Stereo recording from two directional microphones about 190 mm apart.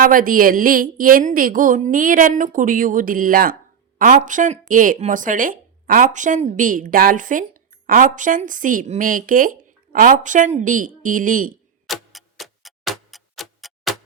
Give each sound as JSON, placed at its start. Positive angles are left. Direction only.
{"t": 0.0, "sound": "a woman's voice", "side_deg": -45}
{"t": 11.9, "sound": "tick-tock", "side_deg": 0}